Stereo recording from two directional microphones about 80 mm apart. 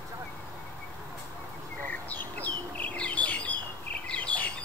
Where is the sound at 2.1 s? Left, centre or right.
Left.